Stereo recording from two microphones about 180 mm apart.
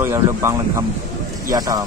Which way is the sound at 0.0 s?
15° right (ahead or behind).